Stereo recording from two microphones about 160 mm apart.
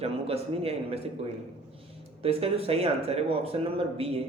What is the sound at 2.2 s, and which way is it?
A man's voice, 40° right (ahead or behind).